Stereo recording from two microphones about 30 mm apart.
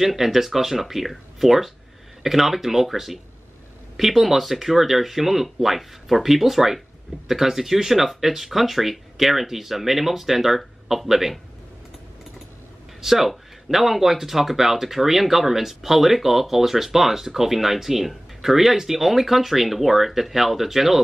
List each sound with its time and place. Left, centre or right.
0.0 s speech: centre
13.0 s speech: centre